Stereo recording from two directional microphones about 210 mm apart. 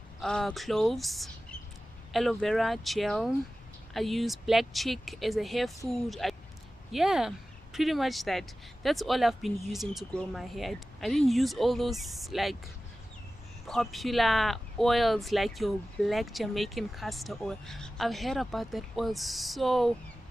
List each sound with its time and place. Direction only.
0.2 s speech: 5° left (ahead or behind)
13.7 s speech: centre (ahead or behind)